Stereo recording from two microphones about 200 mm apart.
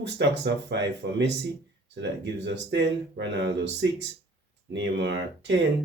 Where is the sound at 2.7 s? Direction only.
60° right (ahead or behind).